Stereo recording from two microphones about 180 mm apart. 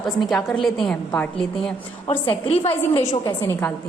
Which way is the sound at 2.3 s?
35° left (ahead or behind).